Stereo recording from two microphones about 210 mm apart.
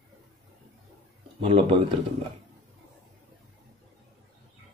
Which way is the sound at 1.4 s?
25° right (ahead or behind).